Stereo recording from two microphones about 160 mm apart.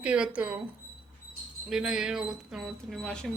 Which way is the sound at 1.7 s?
5° right (ahead or behind).